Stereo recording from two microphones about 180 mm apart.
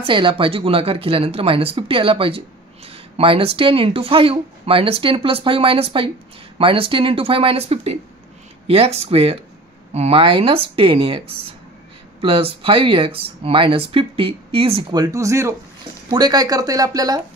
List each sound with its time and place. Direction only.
0.0 s speech: 30° right (ahead or behind)